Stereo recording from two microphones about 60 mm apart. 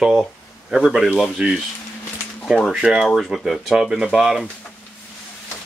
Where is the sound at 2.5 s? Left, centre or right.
Centre.